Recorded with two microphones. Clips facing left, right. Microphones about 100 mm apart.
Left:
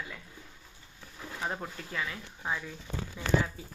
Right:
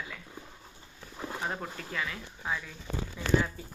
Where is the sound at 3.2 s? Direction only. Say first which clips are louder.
Even; 25° left (ahead or behind).